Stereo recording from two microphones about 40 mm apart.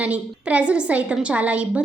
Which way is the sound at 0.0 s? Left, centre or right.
Right.